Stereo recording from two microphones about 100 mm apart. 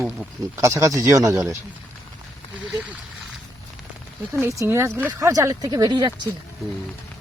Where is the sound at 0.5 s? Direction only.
30° right (ahead or behind).